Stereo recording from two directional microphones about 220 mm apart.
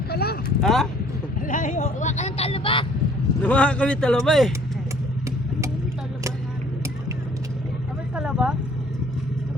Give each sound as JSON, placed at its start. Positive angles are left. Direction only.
{"t": 0.1, "sound": "a sound", "side_deg": 45}
{"t": 0.6, "sound": "a man's voice", "side_deg": 0}
{"t": 1.4, "sound": "speech", "side_deg": 35}
{"t": 3.4, "sound": "a man's voice", "side_deg": 5}
{"t": 8.1, "sound": "vehicle", "side_deg": -5}